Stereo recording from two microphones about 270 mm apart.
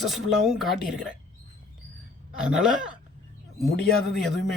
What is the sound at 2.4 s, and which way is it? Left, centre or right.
Speech, centre.